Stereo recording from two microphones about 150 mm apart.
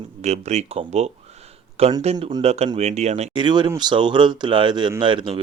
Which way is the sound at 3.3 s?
30° right (ahead or behind).